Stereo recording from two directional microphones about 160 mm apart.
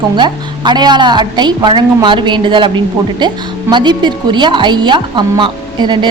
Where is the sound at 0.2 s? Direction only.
30° right (ahead or behind).